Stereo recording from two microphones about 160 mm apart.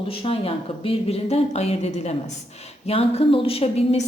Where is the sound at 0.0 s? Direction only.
35° left (ahead or behind).